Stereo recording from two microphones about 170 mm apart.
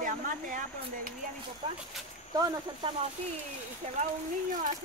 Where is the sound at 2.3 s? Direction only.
20° right (ahead or behind).